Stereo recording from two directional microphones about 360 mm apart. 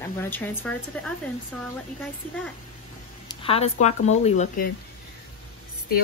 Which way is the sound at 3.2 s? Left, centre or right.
Centre.